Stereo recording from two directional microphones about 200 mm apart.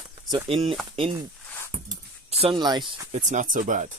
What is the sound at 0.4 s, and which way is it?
Speech, 25° right (ahead or behind).